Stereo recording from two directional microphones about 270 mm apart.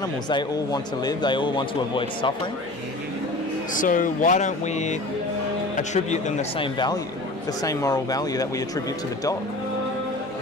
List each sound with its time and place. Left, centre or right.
0.0 s speech: centre
3.7 s speech: left; by 9.4 s centre